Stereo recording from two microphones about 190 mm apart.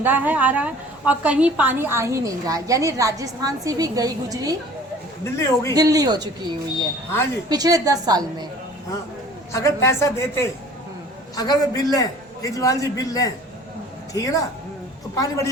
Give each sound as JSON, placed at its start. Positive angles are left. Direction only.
{"t": 0.0, "sound": "a woman's voice", "side_deg": -10}
{"t": 5.2, "sound": "a woman's voice", "side_deg": 15}
{"t": 5.7, "sound": "a woman's voice", "side_deg": -20}
{"t": 9.5, "sound": "a woman's voice", "side_deg": 15}